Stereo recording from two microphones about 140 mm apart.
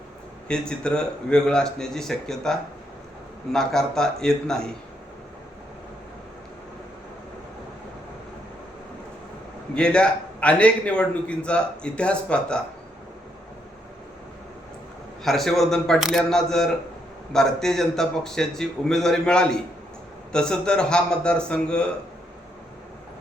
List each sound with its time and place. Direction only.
0.4 s a man's voice: 5° left (ahead or behind)
9.7 s a man's voice: 5° left (ahead or behind)
15.2 s a man's voice: centre (ahead or behind)